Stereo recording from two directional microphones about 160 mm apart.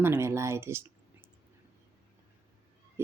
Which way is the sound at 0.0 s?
15° right (ahead or behind).